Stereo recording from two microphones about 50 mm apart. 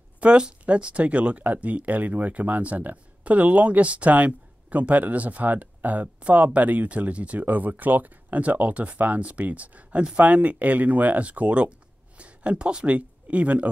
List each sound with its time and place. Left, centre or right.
0.2 s speech: centre